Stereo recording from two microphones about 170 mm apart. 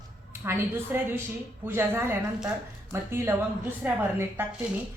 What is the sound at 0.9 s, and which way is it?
A woman's voice, 10° right (ahead or behind).